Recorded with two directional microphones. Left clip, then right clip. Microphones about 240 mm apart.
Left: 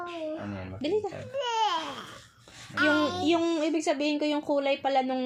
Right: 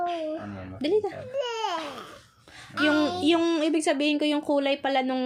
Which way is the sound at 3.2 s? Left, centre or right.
Right.